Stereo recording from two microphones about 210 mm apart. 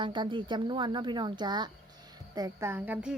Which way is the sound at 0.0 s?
20° right (ahead or behind).